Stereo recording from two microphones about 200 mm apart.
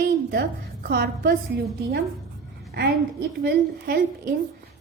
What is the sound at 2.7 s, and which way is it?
A woman's voice, 55° right (ahead or behind).